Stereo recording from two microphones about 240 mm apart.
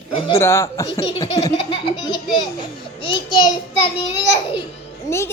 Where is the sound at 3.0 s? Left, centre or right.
Left.